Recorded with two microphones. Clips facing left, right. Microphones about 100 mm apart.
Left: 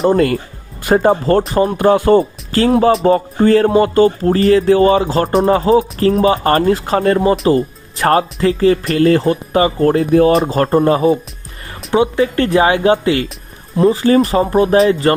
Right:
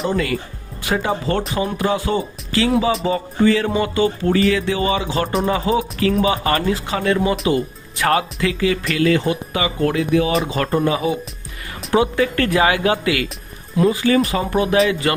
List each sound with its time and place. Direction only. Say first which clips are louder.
0.1 s music: left 8 dB; 50° left (ahead or behind)
5.5 s speech: left 7 dB; 40° left (ahead or behind)
11.9 s speech: left 4 dB; 25° left (ahead or behind)